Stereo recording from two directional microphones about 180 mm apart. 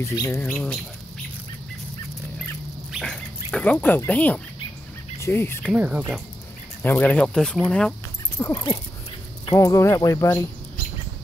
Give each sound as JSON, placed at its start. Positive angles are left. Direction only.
{"t": 0.0, "sound": "speech", "side_deg": 20}
{"t": 2.9, "sound": "a sound", "side_deg": 5}
{"t": 3.5, "sound": "speech", "side_deg": 10}
{"t": 5.7, "sound": "speech", "side_deg": -5}
{"t": 6.8, "sound": "speech", "side_deg": 10}
{"t": 8.4, "sound": "dog", "side_deg": 20}
{"t": 9.5, "sound": "speech", "side_deg": 20}